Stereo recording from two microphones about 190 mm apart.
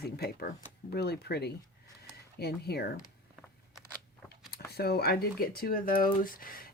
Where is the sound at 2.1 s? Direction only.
55° left (ahead or behind).